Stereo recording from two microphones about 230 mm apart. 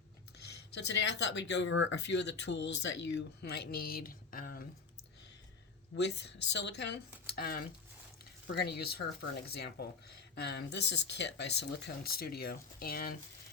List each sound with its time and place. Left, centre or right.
0.3 s speech: left
5.9 s speech: left